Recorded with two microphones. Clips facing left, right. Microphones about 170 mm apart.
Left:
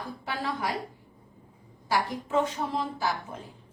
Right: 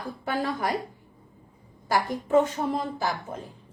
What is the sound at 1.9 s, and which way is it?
A woman's voice, 45° right (ahead or behind).